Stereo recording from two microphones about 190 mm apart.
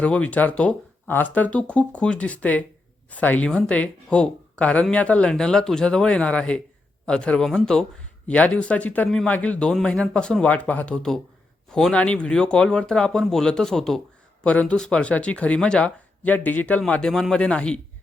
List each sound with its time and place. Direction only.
0.0 s speech: 5° left (ahead or behind)